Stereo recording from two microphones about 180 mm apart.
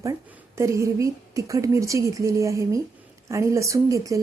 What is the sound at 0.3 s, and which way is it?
A woman's voice, 15° right (ahead or behind).